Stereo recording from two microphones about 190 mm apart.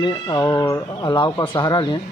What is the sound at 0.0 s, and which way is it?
Speech, 20° left (ahead or behind).